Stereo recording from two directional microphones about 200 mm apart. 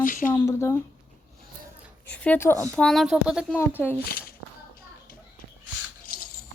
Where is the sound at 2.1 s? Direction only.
5° left (ahead or behind).